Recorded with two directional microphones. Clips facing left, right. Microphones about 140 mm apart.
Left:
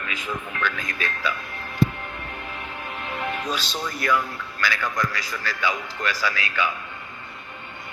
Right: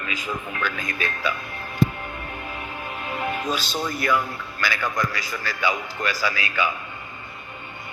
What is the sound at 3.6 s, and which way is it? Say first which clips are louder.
Speech: right 3 dB; 45° right (ahead or behind).